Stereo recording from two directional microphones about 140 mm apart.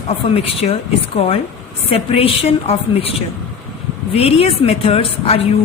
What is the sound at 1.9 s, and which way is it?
A woman's voice, 45° left (ahead or behind).